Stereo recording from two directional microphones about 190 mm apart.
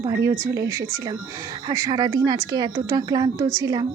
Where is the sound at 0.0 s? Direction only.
15° right (ahead or behind).